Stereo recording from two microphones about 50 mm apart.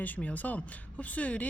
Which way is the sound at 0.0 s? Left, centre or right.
Left.